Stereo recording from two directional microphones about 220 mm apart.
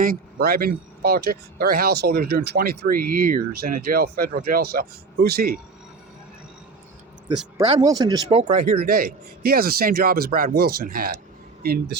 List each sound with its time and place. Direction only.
0.0 s speech: 40° right (ahead or behind)
7.8 s speech: 15° right (ahead or behind); by 11.2 s 40° right (ahead or behind)